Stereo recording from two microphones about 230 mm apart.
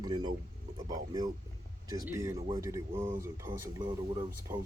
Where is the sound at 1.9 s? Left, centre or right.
Centre.